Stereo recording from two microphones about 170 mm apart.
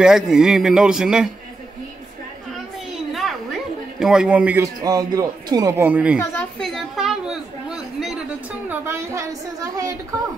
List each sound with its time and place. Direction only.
0.0 s a man's voice: 5° right (ahead or behind)
3.1 s a sound: centre (ahead or behind)
4.0 s a man's voice: 5° right (ahead or behind)
4.8 s a man's voice: 20° right (ahead or behind)
6.1 s a woman's voice: 5° left (ahead or behind); by 9.9 s 20° right (ahead or behind)